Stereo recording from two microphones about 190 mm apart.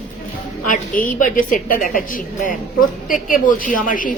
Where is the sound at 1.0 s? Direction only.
45° left (ahead or behind).